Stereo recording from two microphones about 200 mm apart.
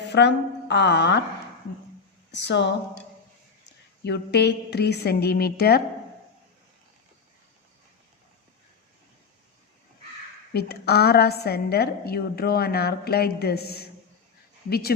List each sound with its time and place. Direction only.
0.1 s a woman's voice: 60° left (ahead or behind)
2.3 s speech: 60° left (ahead or behind)
4.0 s a woman's voice: 55° left (ahead or behind)
10.5 s a woman's voice: 50° left (ahead or behind)